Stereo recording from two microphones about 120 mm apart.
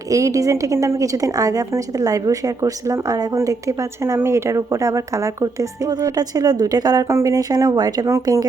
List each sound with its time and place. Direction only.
0.1 s a woman's voice: 25° right (ahead or behind)